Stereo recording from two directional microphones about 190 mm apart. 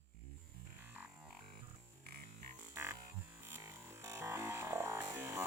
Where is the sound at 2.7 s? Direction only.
15° right (ahead or behind).